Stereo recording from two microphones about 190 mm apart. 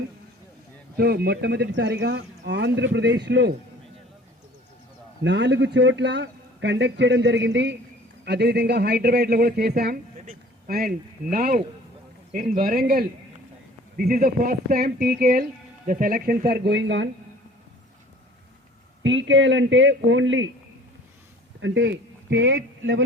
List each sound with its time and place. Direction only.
0.9 s speech: 55° right (ahead or behind)
5.2 s a man's voice: 65° right (ahead or behind)
19.0 s a man's voice: 75° right (ahead or behind)
21.6 s speech: 70° right (ahead or behind); by 23.0 s 90° right